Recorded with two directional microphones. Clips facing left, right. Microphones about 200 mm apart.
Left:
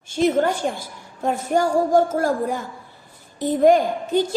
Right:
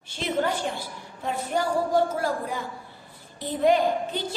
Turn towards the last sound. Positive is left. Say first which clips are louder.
# left 5 dB
turn(degrees=45)  # may be behind; listen again after turning